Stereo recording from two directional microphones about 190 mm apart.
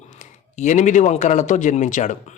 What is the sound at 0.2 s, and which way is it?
A man's voice, 40° left (ahead or behind).